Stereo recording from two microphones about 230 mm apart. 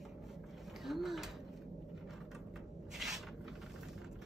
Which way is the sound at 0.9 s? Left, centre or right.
Centre.